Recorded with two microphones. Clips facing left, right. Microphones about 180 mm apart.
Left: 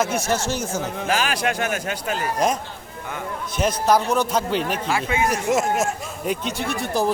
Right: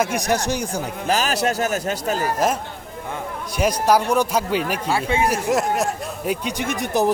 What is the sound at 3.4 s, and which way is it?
Speech, 10° right (ahead or behind).